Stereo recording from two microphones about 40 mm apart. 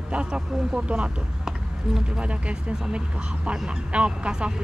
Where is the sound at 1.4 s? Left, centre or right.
Centre.